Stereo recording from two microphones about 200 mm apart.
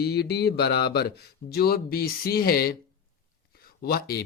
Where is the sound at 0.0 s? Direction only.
55° left (ahead or behind).